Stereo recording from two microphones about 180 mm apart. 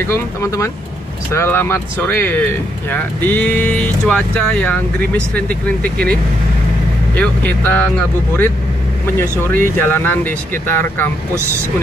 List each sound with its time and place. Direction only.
0.0 s speech: 15° left (ahead or behind)
7.2 s speech: 10° left (ahead or behind)
9.4 s speech: 10° left (ahead or behind)